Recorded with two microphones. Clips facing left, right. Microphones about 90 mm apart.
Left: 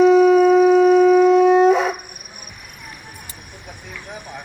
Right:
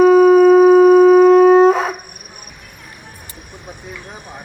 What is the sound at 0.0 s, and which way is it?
Shofar, 45° right (ahead or behind).